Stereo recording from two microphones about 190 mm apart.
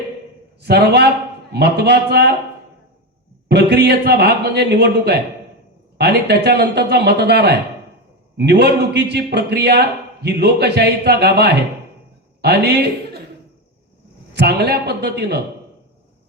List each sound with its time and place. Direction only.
0.6 s a man's voice: 60° right (ahead or behind)
3.5 s a man's voice: 60° right (ahead or behind)
14.3 s a man's voice: 60° right (ahead or behind)